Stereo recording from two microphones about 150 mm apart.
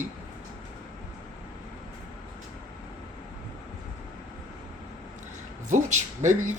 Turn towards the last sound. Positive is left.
turn(degrees=-55)  # may be behind; listen again after turning